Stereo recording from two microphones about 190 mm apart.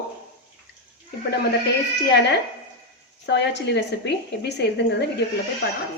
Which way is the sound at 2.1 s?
60° left (ahead or behind).